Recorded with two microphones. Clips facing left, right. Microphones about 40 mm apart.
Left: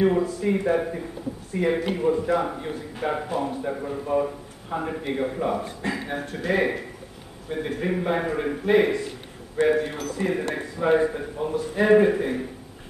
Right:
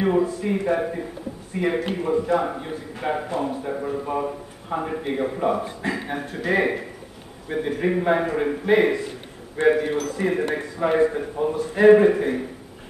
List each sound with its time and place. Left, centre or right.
0.0 s a man's voice: centre